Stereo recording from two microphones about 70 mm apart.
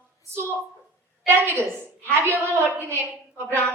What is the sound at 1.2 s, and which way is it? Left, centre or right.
A woman's voice, right.